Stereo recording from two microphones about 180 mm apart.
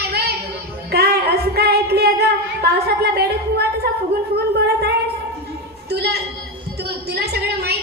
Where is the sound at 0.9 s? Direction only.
65° right (ahead or behind).